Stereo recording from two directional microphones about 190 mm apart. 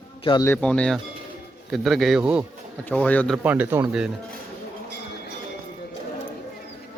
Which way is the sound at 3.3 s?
10° right (ahead or behind).